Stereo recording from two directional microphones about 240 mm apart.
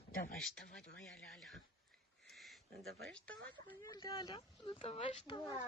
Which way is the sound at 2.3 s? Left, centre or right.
Centre.